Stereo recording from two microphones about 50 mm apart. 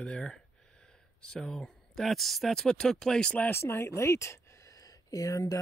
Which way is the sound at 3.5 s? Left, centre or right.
Left.